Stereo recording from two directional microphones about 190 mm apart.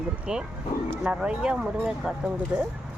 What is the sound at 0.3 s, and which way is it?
Speech, 5° right (ahead or behind).